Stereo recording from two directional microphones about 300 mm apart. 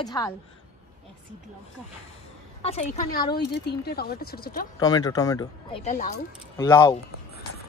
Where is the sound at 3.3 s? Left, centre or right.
Left.